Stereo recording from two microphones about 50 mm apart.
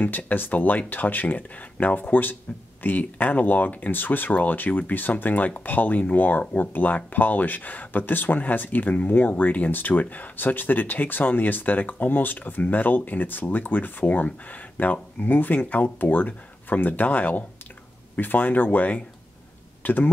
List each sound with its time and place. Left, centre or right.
0.3 s speech: left